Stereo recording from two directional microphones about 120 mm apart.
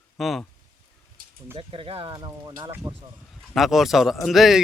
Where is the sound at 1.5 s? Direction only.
45° right (ahead or behind).